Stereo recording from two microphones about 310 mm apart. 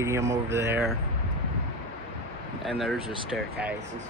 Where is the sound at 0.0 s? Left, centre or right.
Centre.